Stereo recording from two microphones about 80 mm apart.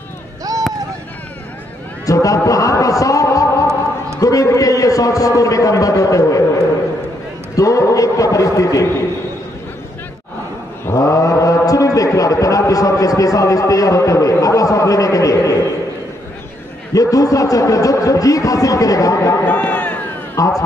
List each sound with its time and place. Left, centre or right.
0.4 s a sound: right
2.0 s a man's voice: left
7.5 s a man's voice: left
11.0 s a man's voice: left
16.9 s a man's voice: left
19.4 s run: centre
20.3 s speech: left